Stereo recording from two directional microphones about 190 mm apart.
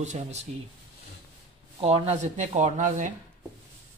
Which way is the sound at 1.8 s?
35° right (ahead or behind).